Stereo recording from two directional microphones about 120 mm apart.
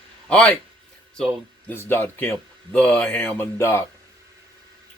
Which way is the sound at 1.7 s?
20° left (ahead or behind).